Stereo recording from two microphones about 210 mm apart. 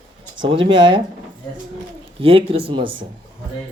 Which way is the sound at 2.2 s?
25° right (ahead or behind).